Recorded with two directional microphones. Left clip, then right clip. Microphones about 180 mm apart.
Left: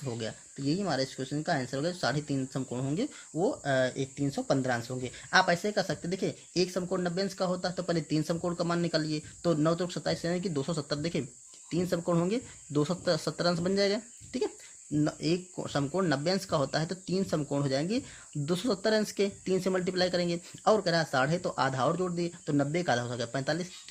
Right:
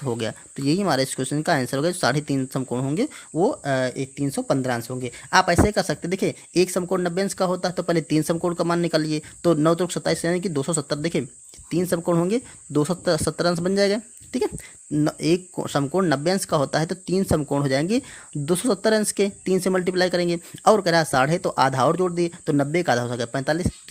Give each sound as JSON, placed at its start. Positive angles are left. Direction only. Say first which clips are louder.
{"t": 0.0, "sound": "speech", "louder": "right 10 dB", "side_deg": -50}